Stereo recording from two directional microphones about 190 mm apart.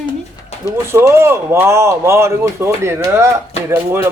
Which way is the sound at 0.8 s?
15° right (ahead or behind).